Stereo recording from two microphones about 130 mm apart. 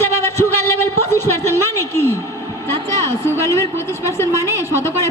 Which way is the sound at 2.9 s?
20° left (ahead or behind).